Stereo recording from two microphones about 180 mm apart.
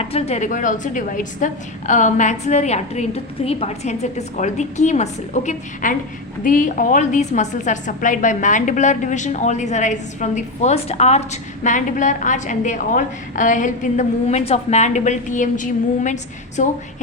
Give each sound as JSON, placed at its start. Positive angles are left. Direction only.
{"t": 0.0, "sound": "a woman's voice", "side_deg": 35}